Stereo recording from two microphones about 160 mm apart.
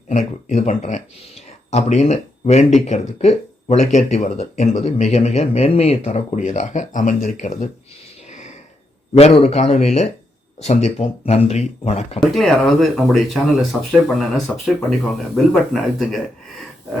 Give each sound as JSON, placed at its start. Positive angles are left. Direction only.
{"t": 0.1, "sound": "speech", "side_deg": 45}
{"t": 8.3, "sound": "a sound", "side_deg": 45}
{"t": 9.1, "sound": "speech", "side_deg": 40}
{"t": 12.3, "sound": "speech", "side_deg": 0}